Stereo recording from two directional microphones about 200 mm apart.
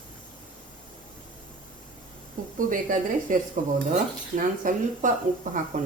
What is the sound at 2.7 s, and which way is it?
Speech, 45° right (ahead or behind).